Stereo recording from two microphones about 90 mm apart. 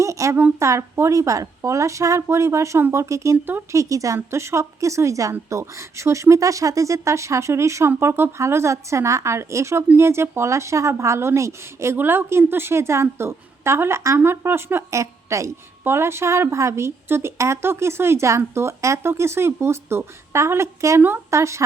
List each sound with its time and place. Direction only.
0.0 s a sound: 35° right (ahead or behind)
0.6 s a woman's voice: 30° right (ahead or behind)
3.3 s a woman's voice: 20° right (ahead or behind)
3.7 s a woman's voice: 35° right (ahead or behind)